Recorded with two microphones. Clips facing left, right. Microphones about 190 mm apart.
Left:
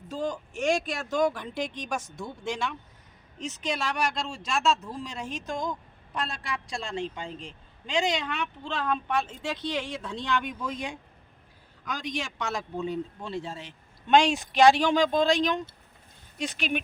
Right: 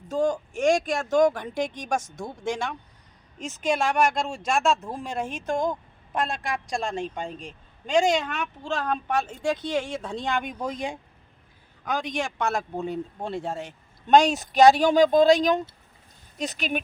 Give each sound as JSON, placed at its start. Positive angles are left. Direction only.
{"t": 0.1, "sound": "a man's voice", "side_deg": -45}